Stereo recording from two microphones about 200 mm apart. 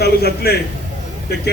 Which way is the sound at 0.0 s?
50° left (ahead or behind).